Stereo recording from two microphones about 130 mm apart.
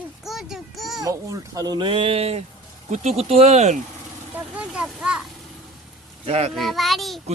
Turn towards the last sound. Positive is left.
turn(degrees=0)  # may be behind; listen again after turning